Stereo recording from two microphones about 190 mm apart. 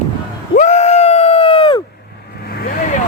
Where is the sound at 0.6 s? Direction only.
35° left (ahead or behind).